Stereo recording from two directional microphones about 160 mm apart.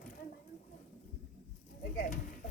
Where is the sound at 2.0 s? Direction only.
55° left (ahead or behind).